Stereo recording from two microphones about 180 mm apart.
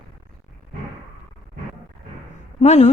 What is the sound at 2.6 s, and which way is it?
Speech, 40° left (ahead or behind).